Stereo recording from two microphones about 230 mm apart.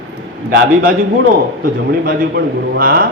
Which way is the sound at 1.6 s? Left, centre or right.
Right.